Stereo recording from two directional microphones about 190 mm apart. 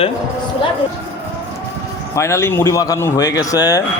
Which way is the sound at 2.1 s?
15° left (ahead or behind).